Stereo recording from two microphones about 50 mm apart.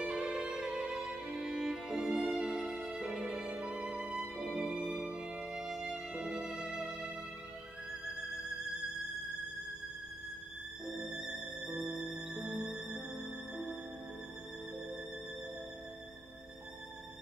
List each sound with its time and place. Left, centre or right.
0.0 s music: centre
2.5 s music: right
2.9 s music: centre
5.4 s music: centre
10.9 s music: centre